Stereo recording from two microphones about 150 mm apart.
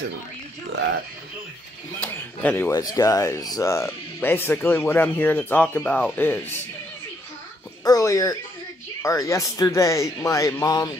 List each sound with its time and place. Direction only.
2.0 s a sound: 10° left (ahead or behind)
2.7 s speech: 25° left (ahead or behind)
7.8 s speech: 20° left (ahead or behind)